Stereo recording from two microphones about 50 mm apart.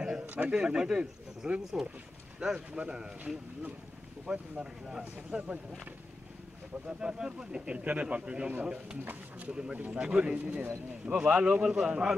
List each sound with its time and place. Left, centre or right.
0.5 s speech: centre
6.9 s speech: centre